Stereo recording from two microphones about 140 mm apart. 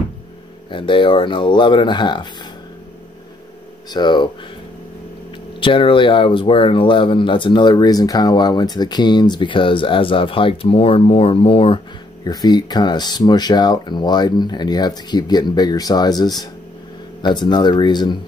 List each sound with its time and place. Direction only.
0.7 s speech: 35° left (ahead or behind)
3.9 s speech: 35° left (ahead or behind)
5.6 s speech: 35° left (ahead or behind)
12.3 s speech: 30° left (ahead or behind)